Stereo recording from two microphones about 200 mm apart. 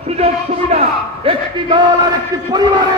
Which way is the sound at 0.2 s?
30° right (ahead or behind).